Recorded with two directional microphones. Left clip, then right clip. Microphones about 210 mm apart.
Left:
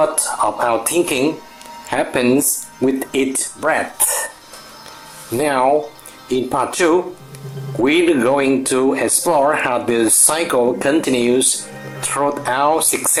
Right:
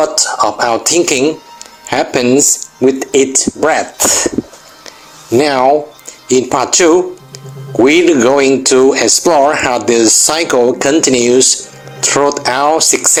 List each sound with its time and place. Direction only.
0.0 s speech: 25° right (ahead or behind)
5.4 s speech: 30° right (ahead or behind)